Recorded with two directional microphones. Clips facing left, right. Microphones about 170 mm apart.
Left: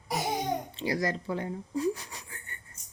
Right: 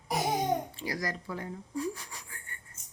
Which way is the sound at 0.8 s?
25° left (ahead or behind).